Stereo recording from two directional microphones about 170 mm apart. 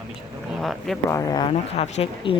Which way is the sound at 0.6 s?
Centre (ahead or behind).